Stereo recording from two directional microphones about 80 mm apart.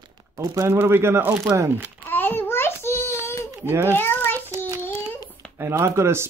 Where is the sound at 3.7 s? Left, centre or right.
Right.